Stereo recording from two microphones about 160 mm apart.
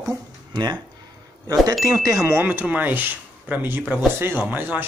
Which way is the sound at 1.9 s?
20° right (ahead or behind).